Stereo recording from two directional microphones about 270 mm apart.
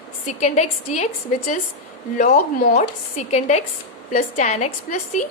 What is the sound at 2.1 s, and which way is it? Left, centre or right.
A woman's voice, left.